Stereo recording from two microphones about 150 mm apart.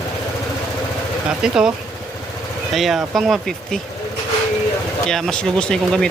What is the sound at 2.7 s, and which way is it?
Speech, centre (ahead or behind).